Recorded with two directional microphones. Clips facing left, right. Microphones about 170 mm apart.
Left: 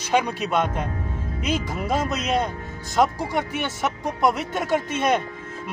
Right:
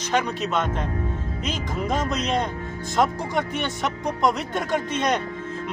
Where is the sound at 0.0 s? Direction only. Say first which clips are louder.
Left 2 dB; 10° left (ahead or behind).